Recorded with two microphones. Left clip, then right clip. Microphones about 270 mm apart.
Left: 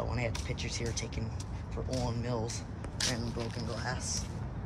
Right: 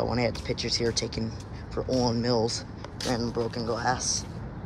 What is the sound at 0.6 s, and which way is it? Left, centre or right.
Speech, centre.